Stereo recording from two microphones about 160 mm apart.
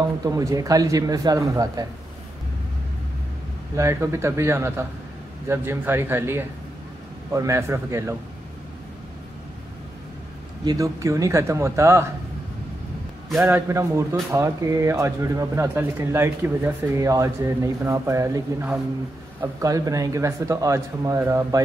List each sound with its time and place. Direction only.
0.0 s speech: 20° right (ahead or behind)
3.7 s speech: 20° right (ahead or behind)
10.6 s speech: 20° right (ahead or behind)
13.5 s speech: 15° right (ahead or behind)